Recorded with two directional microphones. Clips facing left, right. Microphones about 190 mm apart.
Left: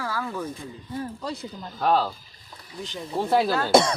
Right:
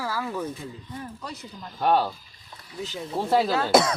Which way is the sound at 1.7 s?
5° right (ahead or behind).